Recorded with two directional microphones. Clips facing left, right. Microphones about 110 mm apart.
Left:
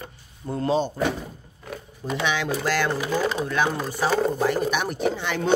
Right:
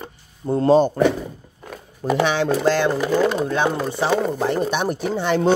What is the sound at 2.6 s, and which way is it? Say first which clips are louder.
Speech: right 6 dB; 25° right (ahead or behind).